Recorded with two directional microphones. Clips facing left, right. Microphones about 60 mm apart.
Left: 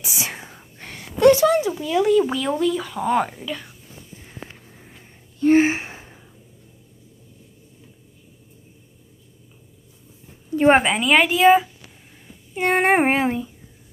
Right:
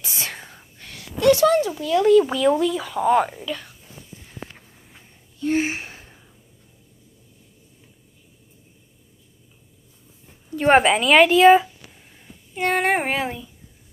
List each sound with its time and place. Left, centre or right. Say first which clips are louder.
0.0 s whispering: left 2 dB; centre
0.7 s a sound: left 6 dB; left
1.4 s a sound: right 1 dB; centre
1.8 s speech: right 2 dB; centre
3.3 s speech: even; centre
4.2 s sniff: even; left
5.4 s gasp: left 7 dB; left; by 6.2 s centre
10.7 s speech: right 2 dB; centre
12.7 s speech: left 5 dB; left